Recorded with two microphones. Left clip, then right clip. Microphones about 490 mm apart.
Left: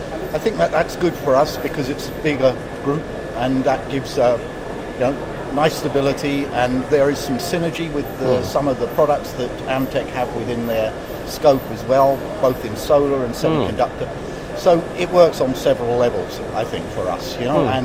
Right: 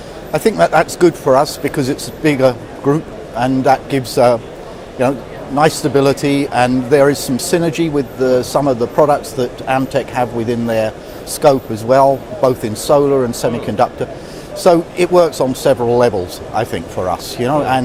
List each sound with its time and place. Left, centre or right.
0.3 s speech: right